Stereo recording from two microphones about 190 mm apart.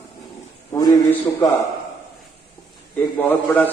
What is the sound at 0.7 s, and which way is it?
Speech, 15° left (ahead or behind).